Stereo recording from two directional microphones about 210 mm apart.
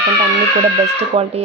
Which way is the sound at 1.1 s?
25° right (ahead or behind).